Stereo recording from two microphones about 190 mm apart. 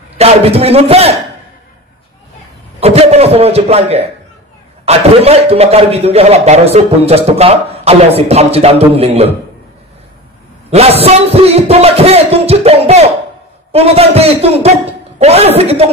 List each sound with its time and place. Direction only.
0.2 s a man's voice: 30° right (ahead or behind)
2.8 s a sound: 35° right (ahead or behind)
4.8 s a man's voice: 35° right (ahead or behind)
10.7 s a man's voice: 30° right (ahead or behind)